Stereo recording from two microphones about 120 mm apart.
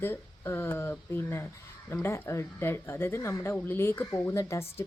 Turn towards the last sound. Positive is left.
turn(degrees=20)  # may be behind; listen again after turning